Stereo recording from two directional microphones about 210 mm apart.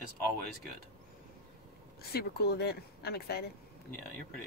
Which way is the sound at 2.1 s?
50° left (ahead or behind).